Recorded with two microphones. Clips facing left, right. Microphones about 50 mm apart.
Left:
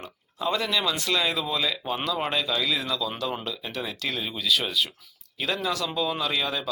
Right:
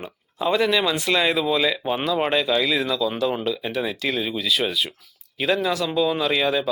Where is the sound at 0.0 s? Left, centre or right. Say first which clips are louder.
Right 4 dB; centre.